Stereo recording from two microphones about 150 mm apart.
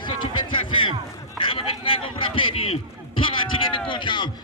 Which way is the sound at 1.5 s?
35° left (ahead or behind).